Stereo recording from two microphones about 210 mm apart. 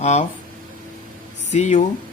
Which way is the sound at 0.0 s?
35° left (ahead or behind).